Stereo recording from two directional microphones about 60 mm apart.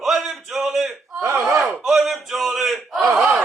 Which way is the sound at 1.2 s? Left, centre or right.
Right.